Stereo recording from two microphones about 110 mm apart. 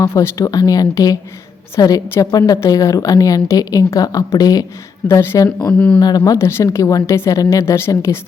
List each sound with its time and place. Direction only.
0.0 s a woman's voice: 30° left (ahead or behind)
5.7 s speech: 10° left (ahead or behind)
6.0 s speech: 35° left (ahead or behind)